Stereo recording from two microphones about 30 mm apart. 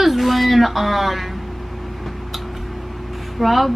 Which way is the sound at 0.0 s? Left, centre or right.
Centre.